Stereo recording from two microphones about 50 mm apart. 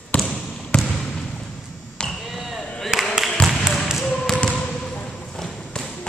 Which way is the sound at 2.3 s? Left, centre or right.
Centre.